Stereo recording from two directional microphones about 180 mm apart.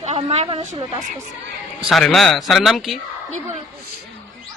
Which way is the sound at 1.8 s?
Centre (ahead or behind).